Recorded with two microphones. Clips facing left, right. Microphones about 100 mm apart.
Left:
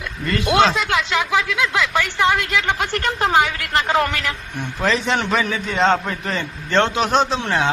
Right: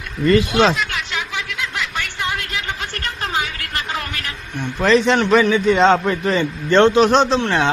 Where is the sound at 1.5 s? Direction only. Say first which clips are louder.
Left 6 dB; 90° left.